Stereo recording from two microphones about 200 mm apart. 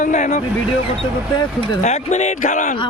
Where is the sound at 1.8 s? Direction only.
35° left (ahead or behind).